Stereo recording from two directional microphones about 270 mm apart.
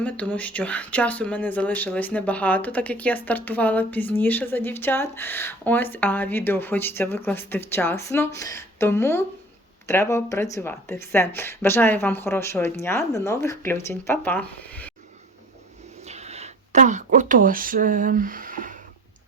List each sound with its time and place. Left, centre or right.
0.0 s speech: centre
16.0 s speech: right